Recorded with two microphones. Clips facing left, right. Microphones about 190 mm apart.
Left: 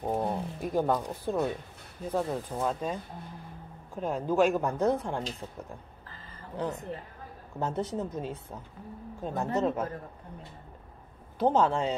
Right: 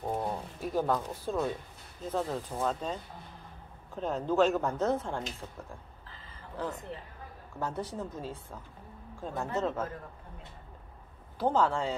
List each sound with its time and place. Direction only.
0.0 s speech: 20° left (ahead or behind)
6.6 s speech: 20° left (ahead or behind)
11.3 s speech: 20° left (ahead or behind)